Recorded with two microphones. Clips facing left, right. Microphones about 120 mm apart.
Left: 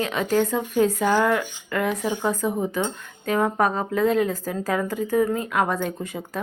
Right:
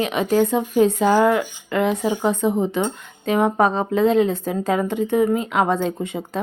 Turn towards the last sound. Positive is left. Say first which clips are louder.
# right 4 dB
turn(degrees=-25)  # may be behind; listen again after turning